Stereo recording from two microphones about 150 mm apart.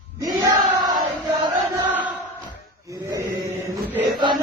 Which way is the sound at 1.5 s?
25° right (ahead or behind).